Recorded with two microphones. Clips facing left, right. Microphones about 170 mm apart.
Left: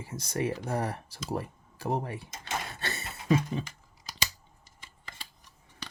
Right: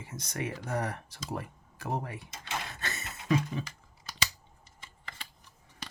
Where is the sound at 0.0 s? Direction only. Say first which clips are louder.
Left 5 dB; 30° left (ahead or behind).